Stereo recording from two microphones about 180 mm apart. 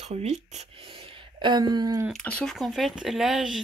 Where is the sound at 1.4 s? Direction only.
25° right (ahead or behind).